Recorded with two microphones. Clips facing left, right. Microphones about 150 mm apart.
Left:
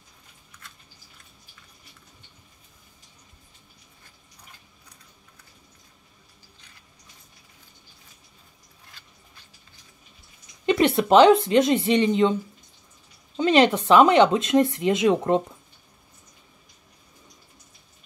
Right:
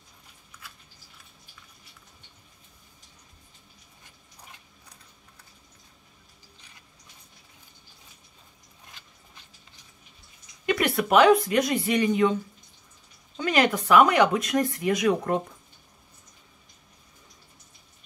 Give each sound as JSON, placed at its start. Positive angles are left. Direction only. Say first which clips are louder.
{"t": 10.6, "sound": "a sound", "louder": "left 5 dB", "side_deg": 30}
{"t": 11.0, "sound": "speech", "louder": "left 3 dB", "side_deg": 25}
{"t": 13.4, "sound": "speech", "louder": "left 5 dB", "side_deg": 25}